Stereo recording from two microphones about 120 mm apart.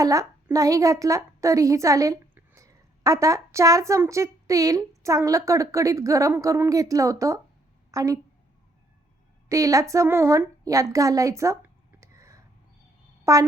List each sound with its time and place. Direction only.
0.0 s a woman's voice: 30° right (ahead or behind)
9.5 s a woman's voice: 30° right (ahead or behind)